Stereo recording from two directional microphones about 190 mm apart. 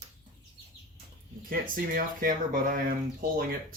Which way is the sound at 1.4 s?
45° right (ahead or behind).